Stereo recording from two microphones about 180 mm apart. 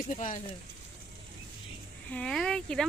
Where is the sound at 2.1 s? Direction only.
5° left (ahead or behind).